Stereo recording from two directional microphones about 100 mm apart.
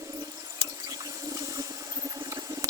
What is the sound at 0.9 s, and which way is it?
Toilet flush, 35° right (ahead or behind).